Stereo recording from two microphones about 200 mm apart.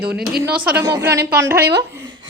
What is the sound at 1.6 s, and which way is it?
Speech, 55° right (ahead or behind).